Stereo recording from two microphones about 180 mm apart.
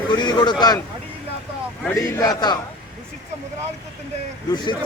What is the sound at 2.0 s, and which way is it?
Speech, 20° left (ahead or behind).